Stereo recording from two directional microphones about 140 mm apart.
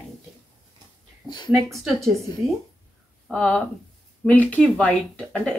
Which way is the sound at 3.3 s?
5° left (ahead or behind).